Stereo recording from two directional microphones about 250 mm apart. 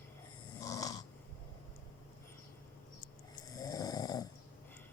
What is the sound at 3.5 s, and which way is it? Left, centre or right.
Snoring, centre.